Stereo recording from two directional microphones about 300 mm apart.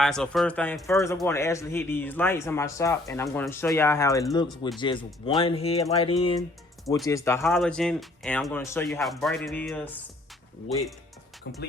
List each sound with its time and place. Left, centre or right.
0.0 s speech: centre
11.5 s speech: left